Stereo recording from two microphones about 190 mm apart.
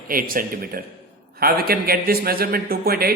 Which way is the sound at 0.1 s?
50° right (ahead or behind).